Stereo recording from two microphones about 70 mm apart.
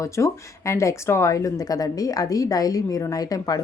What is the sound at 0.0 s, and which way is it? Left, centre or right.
Speech, left.